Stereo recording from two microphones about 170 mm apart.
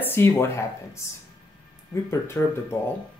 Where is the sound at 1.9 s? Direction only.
15° left (ahead or behind).